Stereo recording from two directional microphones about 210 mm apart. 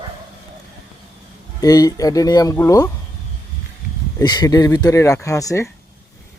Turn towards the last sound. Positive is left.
turn(degrees=15)  # may be behind; listen again after turning